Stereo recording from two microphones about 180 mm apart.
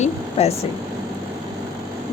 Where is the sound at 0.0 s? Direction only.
35° left (ahead or behind).